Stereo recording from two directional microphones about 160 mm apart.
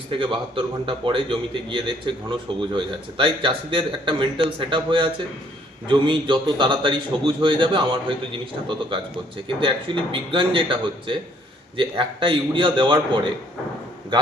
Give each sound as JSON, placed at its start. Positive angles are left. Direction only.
{"t": 0.1, "sound": "a man's voice", "side_deg": -30}